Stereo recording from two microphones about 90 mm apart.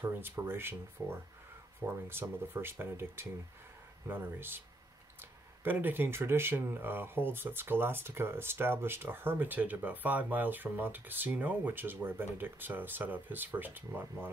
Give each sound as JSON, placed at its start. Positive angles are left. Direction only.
{"t": 0.0, "sound": "speech", "side_deg": -25}